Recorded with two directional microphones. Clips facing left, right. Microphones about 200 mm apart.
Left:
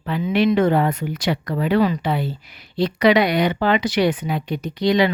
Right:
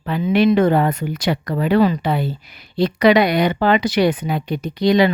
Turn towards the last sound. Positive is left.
turn(degrees=-40)  # may be behind; listen again after turning